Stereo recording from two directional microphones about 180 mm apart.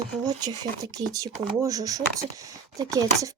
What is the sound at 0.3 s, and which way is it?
Speech, 20° right (ahead or behind).